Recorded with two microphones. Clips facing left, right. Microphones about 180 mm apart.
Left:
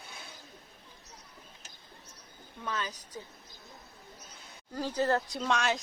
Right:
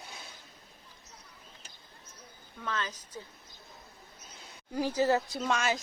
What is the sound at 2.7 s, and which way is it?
Speech, 15° left (ahead or behind).